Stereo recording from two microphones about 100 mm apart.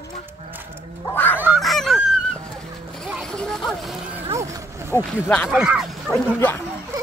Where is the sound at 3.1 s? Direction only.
5° left (ahead or behind).